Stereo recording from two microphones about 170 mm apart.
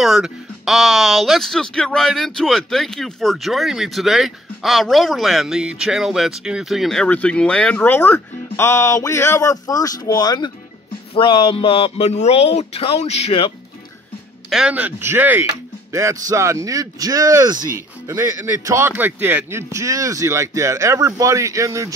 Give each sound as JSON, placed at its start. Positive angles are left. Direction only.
{"t": 0.0, "sound": "a man's voice", "side_deg": 0}
{"t": 14.5, "sound": "speech", "side_deg": -5}